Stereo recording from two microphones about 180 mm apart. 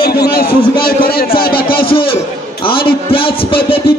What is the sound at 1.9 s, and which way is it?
Speech, 30° left (ahead or behind).